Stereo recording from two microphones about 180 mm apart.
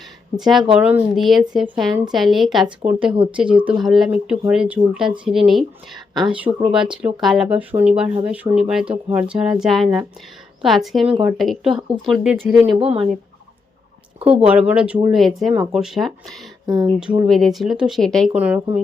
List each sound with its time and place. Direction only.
0.3 s speech: centre (ahead or behind)
12.8 s speech: 30° right (ahead or behind)
14.2 s speech: 30° right (ahead or behind)
14.7 s speech: 5° right (ahead or behind)
16.6 s speech: 25° right (ahead or behind)
17.2 s speech: centre (ahead or behind)